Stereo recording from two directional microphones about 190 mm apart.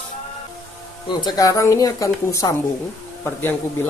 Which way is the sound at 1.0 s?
20° left (ahead or behind).